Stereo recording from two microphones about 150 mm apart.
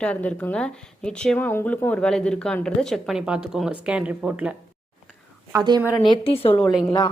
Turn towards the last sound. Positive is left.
turn(degrees=0)  # may be behind; listen again after turning